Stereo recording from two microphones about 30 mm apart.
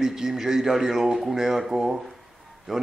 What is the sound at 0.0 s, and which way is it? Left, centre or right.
Speech, centre.